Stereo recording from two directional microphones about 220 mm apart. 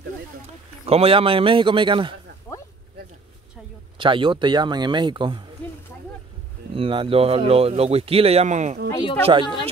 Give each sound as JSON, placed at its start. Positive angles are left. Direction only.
{"t": 0.8, "sound": "speech", "side_deg": -25}
{"t": 4.0, "sound": "speech", "side_deg": -20}
{"t": 6.7, "sound": "speech", "side_deg": -25}